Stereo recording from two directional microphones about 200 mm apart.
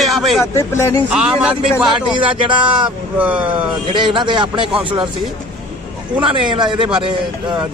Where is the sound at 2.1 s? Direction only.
25° right (ahead or behind).